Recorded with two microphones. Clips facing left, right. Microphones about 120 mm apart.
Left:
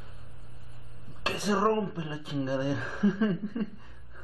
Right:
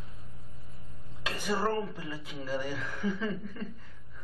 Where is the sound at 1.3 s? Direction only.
35° left (ahead or behind).